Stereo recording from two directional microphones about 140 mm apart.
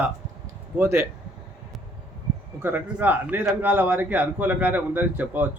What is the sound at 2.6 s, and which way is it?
A man's voice, 15° right (ahead or behind).